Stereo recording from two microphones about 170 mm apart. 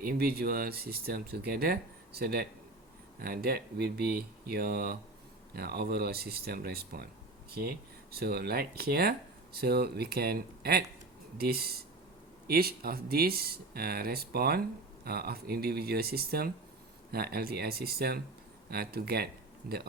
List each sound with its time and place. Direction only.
0.0 s speech: 65° right (ahead or behind)